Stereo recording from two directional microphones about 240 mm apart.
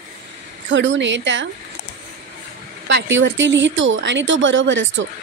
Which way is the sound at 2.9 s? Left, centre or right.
Right.